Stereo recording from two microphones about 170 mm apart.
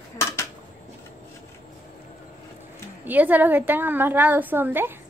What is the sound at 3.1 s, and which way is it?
Speech, 10° right (ahead or behind).